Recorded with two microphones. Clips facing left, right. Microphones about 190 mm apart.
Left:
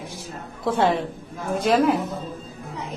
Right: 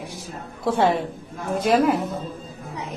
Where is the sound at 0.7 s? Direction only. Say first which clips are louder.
Right 1 dB; 50° right (ahead or behind).